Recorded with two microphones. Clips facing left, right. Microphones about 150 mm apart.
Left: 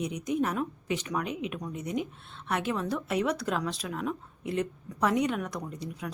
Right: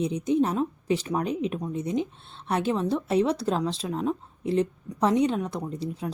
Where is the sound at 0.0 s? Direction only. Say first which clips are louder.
Right 6 dB; 30° right (ahead or behind).